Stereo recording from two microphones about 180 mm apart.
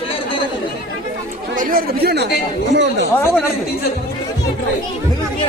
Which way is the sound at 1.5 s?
55° right (ahead or behind).